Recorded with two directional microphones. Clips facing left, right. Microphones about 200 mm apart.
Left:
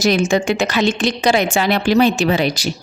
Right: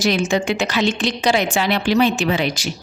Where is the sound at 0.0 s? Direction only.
45° left (ahead or behind).